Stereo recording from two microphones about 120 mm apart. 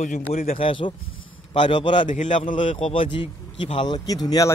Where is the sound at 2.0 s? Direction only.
90° left.